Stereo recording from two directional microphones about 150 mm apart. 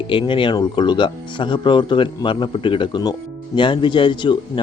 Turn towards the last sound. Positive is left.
turn(degrees=30)  # may be behind; listen again after turning